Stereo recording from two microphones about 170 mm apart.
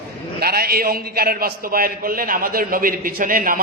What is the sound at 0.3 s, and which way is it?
A man's voice, 65° right (ahead or behind).